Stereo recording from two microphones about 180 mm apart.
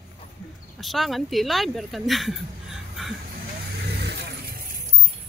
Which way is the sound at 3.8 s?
65° right (ahead or behind).